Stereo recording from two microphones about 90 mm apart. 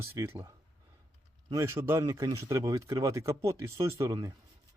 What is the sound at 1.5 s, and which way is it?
Speech, 30° right (ahead or behind).